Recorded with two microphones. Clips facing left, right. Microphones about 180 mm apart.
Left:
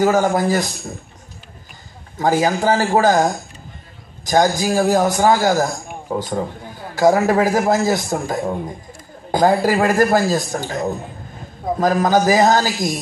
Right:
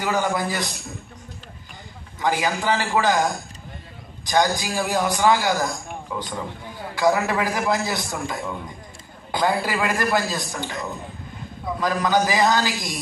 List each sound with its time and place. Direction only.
0.0 s a man's voice: 45° left (ahead or behind)
2.1 s a man's voice: 45° left (ahead or behind)